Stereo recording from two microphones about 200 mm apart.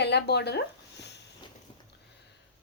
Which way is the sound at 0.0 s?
55° left (ahead or behind).